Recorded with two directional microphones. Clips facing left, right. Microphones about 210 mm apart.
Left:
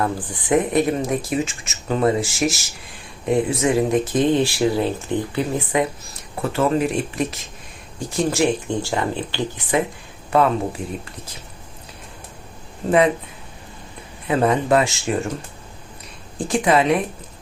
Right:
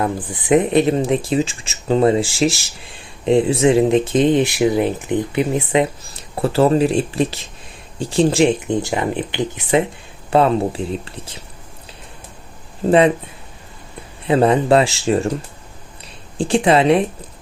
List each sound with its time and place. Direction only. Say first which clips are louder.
0.0 s speech: right 2 dB; 20° right (ahead or behind)
6.4 s speech: right 5 dB; 35° right (ahead or behind)
14.3 s speech: right 4 dB; 30° right (ahead or behind)
16.4 s speech: right 4 dB; 30° right (ahead or behind)